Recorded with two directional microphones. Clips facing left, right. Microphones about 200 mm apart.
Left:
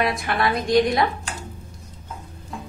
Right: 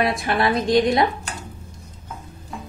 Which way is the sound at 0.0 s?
25° right (ahead or behind).